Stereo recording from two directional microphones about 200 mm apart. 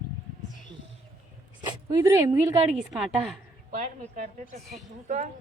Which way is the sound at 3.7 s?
35° right (ahead or behind).